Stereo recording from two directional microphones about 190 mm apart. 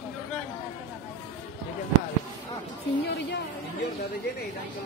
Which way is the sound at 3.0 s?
65° left (ahead or behind).